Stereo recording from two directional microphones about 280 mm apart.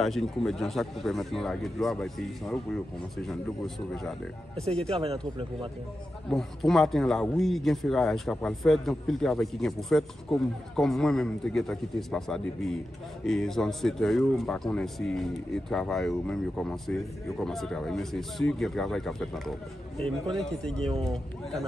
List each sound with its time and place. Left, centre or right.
0.0 s a man's voice: centre
4.9 s speech: right
6.3 s a man's voice: centre